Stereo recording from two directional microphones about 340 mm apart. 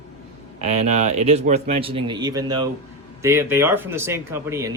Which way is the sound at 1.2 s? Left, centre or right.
Centre.